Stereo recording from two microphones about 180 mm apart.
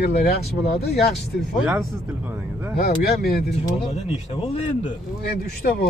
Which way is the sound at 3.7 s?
30° left (ahead or behind).